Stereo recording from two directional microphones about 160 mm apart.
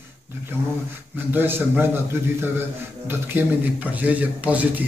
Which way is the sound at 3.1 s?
10° right (ahead or behind).